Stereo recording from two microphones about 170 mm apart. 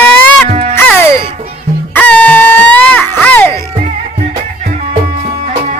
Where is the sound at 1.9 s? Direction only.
10° left (ahead or behind).